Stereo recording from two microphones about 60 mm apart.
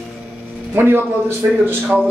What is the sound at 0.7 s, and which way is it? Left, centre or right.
Speech, right.